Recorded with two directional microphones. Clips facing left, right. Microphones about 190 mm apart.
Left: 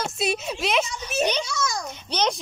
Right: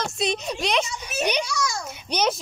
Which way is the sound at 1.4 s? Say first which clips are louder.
Even; 20° left (ahead or behind).